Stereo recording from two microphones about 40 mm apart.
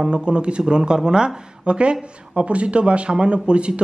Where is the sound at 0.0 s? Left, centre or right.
Right.